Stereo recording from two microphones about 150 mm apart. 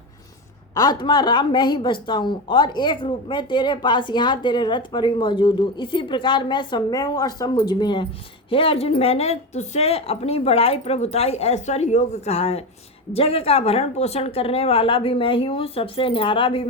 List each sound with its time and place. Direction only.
0.7 s a woman's voice: 25° left (ahead or behind)